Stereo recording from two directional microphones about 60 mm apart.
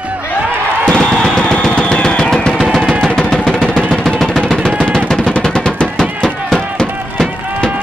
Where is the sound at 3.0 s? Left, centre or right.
Centre.